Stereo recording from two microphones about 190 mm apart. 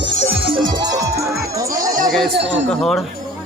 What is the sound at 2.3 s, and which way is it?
Speech, 65° right (ahead or behind).